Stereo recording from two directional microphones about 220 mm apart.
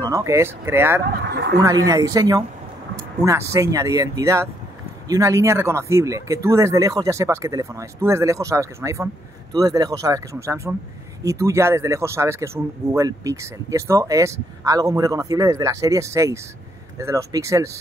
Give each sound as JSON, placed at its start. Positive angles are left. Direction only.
{"t": 0.0, "sound": "speech", "side_deg": -15}
{"t": 1.1, "sound": "speech", "side_deg": -50}
{"t": 1.6, "sound": "speech", "side_deg": -15}